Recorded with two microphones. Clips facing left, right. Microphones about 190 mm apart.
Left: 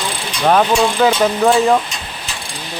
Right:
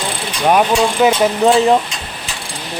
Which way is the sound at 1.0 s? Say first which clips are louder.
Right 2 dB; 20° right (ahead or behind).